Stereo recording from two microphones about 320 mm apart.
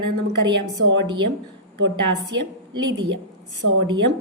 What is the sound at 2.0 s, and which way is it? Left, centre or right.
A woman's voice, right.